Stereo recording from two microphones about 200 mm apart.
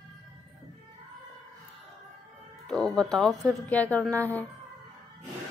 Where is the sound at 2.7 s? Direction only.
5° left (ahead or behind).